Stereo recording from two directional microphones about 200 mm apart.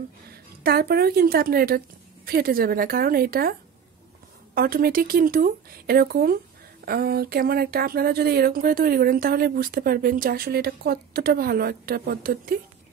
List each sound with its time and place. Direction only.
0.7 s speech: 50° right (ahead or behind)
4.6 s speech: 50° right (ahead or behind)